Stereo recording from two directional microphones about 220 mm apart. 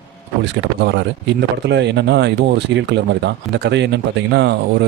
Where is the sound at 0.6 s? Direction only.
50° right (ahead or behind).